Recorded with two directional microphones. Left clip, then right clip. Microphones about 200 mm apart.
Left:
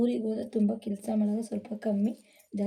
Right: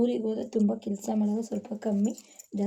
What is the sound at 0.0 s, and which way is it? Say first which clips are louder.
Speech: right 2 dB; 10° right (ahead or behind).